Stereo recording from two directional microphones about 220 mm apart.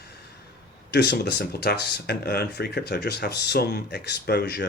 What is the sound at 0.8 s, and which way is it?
Speech, 50° left (ahead or behind).